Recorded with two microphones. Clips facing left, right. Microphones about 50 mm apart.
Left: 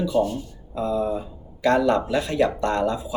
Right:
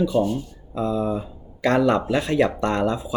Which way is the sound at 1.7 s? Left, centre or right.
Right.